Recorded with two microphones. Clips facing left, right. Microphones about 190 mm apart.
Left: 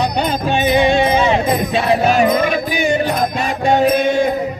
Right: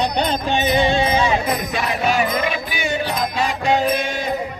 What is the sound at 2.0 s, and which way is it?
Music, 45° left (ahead or behind).